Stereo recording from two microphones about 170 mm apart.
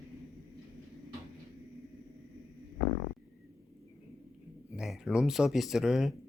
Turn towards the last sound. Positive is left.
turn(degrees=0)  # may be behind; listen again after turning